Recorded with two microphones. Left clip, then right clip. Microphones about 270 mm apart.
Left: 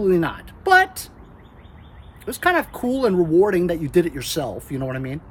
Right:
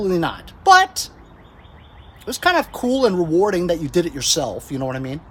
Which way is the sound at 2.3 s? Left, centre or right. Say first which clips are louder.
Right 2 dB; right.